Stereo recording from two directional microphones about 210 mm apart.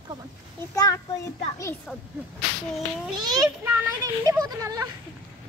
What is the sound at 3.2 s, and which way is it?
A child's voice, 20° right (ahead or behind).